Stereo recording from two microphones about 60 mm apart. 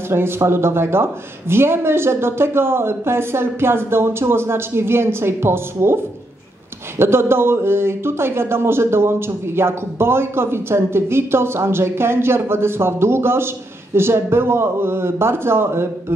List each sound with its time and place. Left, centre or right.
0.1 s speech: right
7.0 s speech: right